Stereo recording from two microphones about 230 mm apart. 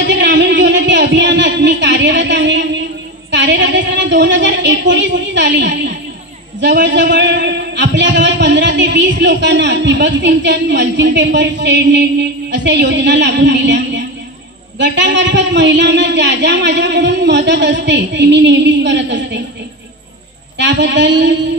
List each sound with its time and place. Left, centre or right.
0.0 s a man's voice: right
20.5 s a man's voice: right